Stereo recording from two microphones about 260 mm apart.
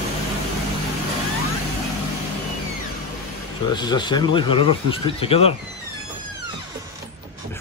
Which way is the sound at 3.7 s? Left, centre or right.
Centre.